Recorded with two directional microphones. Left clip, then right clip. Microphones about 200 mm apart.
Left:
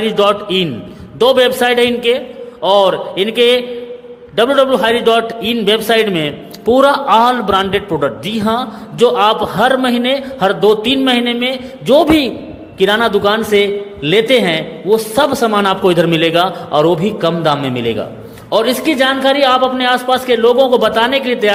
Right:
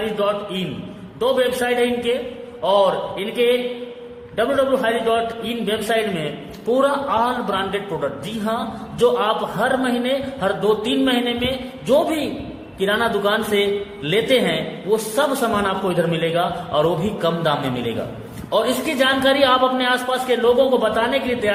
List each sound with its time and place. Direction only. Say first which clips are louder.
0.2 s a man's voice: left 12 dB; 45° left (ahead or behind)